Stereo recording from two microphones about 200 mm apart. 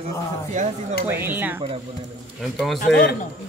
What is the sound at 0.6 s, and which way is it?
Speech, 35° right (ahead or behind).